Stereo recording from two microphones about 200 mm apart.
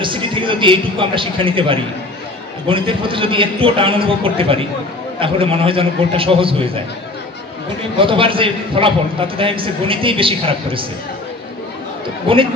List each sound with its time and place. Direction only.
0.0 s a man's voice: 25° right (ahead or behind)
8.0 s a man's voice: 25° right (ahead or behind)
12.3 s a man's voice: 25° right (ahead or behind)